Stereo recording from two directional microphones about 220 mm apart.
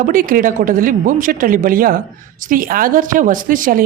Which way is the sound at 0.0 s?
40° right (ahead or behind).